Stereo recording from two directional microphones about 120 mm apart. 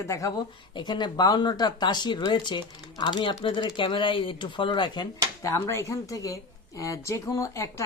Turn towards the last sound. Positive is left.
turn(degrees=25)  # may be behind; listen again after turning